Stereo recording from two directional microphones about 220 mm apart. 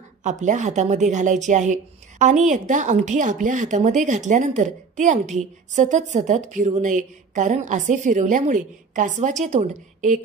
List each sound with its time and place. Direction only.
0.2 s a woman's voice: 35° right (ahead or behind)